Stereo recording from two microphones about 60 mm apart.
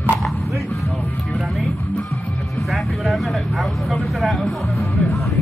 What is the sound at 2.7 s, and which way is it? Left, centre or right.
Vehicle, centre.